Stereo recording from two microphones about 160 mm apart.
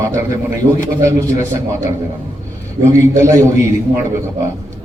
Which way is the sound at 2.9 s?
20° right (ahead or behind).